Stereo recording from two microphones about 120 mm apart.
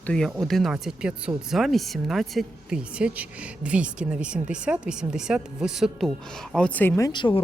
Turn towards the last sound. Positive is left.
turn(degrees=40)  # may be behind; listen again after turning